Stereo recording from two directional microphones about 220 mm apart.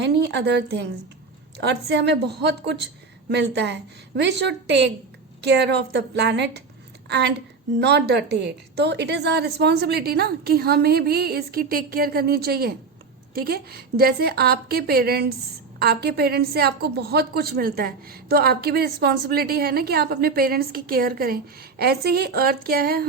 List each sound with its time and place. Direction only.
0.0 s a woman's voice: 50° right (ahead or behind)